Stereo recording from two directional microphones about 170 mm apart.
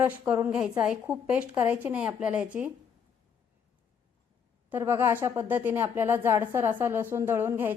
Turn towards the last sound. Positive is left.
turn(degrees=-15)  # may be behind; listen again after turning